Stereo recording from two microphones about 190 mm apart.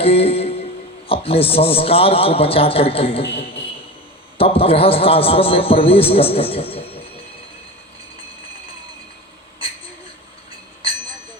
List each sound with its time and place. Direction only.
0.0 s a man's voice: 30° left (ahead or behind)
4.4 s a man's voice: 30° left (ahead or behind)